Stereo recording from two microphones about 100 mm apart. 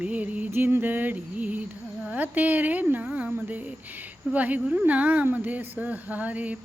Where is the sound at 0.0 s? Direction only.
15° right (ahead or behind).